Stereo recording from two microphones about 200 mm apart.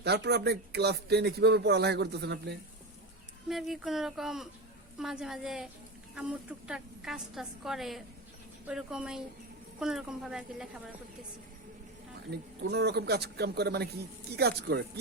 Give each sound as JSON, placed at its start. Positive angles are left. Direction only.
{"t": 0.0, "sound": "speech", "side_deg": -55}
{"t": 3.5, "sound": "a woman's voice", "side_deg": 0}
{"t": 12.3, "sound": "speech", "side_deg": -55}